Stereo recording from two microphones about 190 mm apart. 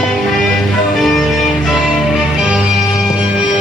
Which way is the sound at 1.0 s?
Centre (ahead or behind).